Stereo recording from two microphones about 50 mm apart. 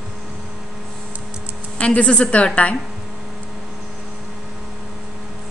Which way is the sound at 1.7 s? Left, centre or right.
Left.